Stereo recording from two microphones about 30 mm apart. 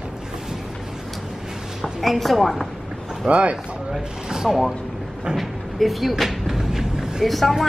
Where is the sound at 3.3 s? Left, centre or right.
Right.